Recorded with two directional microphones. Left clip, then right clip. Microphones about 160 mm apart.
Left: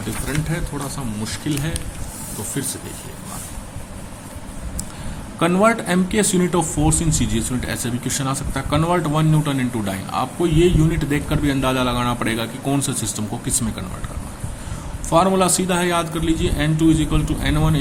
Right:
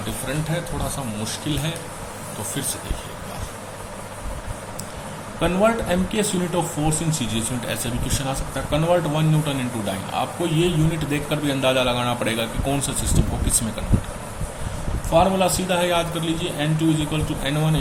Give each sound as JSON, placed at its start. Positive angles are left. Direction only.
{"t": 1.2, "sound": "speech", "side_deg": 25}
{"t": 5.4, "sound": "speech", "side_deg": 40}
{"t": 15.1, "sound": "speech", "side_deg": 45}